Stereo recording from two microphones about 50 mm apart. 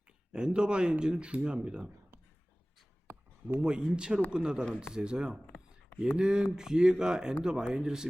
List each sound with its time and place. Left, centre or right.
0.3 s speech: centre
3.6 s speech: centre